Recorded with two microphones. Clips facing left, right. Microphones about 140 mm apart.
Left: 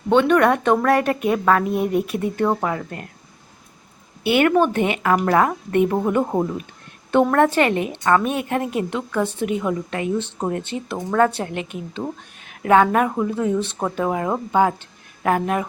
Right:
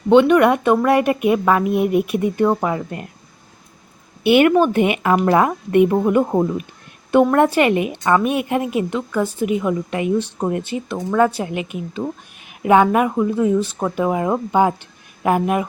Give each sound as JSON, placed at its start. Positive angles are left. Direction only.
{"t": 0.1, "sound": "a woman's voice", "side_deg": -10}
{"t": 4.2, "sound": "a woman's voice", "side_deg": -20}